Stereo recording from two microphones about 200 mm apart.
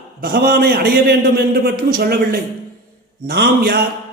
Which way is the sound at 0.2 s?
50° right (ahead or behind).